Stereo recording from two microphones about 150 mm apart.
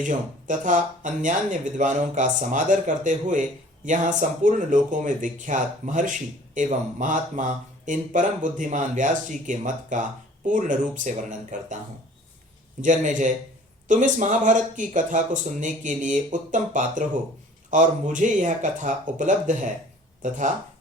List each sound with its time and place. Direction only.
0.0 s speech: 55° right (ahead or behind)
12.8 s speech: 60° right (ahead or behind)